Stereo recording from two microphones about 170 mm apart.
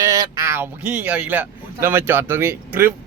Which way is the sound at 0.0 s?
20° right (ahead or behind).